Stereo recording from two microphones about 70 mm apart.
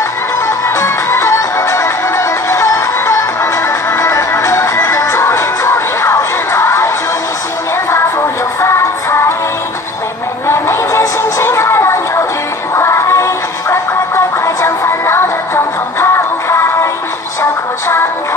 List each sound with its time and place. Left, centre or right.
0.5 s music: left
7.9 s music: left
10.4 s music: left